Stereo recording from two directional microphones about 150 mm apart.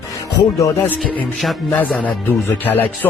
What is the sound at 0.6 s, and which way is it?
Speech, 10° left (ahead or behind).